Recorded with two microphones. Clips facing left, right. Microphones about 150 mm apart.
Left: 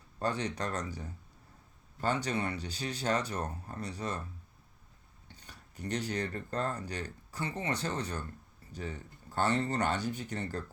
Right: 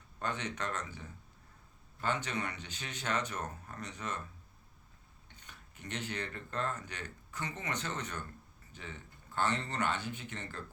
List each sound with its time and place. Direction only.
0.2 s speech: 35° left (ahead or behind)
5.3 s speech: 35° left (ahead or behind)